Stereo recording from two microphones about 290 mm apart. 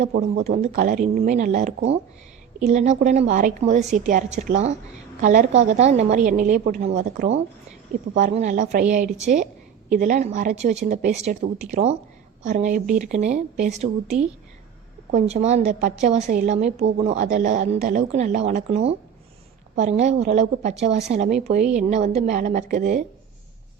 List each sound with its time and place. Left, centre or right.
0.0 s speech: right